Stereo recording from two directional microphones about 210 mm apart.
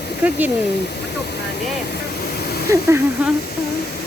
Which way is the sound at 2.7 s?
10° right (ahead or behind).